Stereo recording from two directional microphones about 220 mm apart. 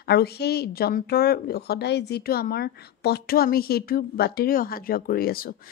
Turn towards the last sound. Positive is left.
turn(degrees=40)  # may be behind; listen again after turning